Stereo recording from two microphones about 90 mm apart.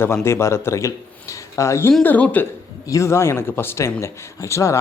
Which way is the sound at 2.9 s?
35° left (ahead or behind).